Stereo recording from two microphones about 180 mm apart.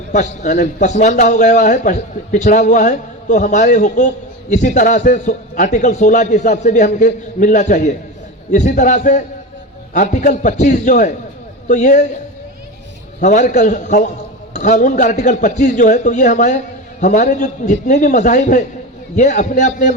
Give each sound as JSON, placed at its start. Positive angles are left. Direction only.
{"t": 0.1, "sound": "a man's voice", "side_deg": 45}
{"t": 13.1, "sound": "a man's voice", "side_deg": 40}